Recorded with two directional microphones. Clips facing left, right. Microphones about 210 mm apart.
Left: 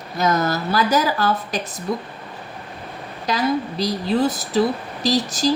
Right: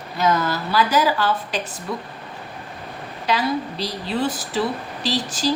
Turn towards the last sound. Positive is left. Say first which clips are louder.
# left 4 dB
turn(degrees=40)  # may be behind; listen again after turning